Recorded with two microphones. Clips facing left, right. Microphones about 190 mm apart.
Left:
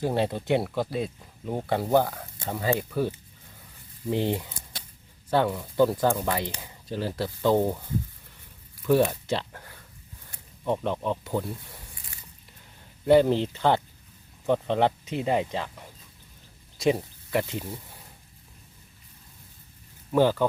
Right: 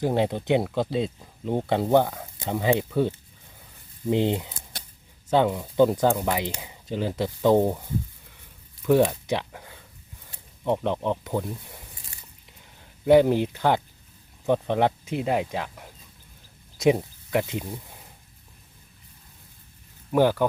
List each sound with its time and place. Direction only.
0.0 s speech: 15° right (ahead or behind)
4.1 s speech: 20° right (ahead or behind)
8.9 s speech: 15° right (ahead or behind)
13.1 s speech: 15° right (ahead or behind)
20.1 s speech: 15° right (ahead or behind)